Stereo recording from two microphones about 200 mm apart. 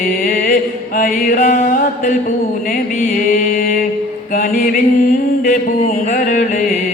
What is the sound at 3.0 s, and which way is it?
Music, 45° left (ahead or behind).